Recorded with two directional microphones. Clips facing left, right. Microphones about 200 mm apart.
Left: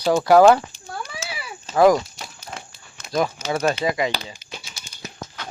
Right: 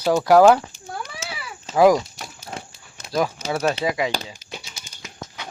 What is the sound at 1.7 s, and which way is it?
Speech, 10° right (ahead or behind).